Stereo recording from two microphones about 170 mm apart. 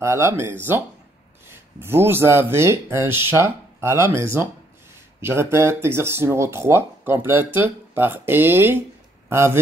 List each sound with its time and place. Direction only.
0.0 s speech: 15° right (ahead or behind)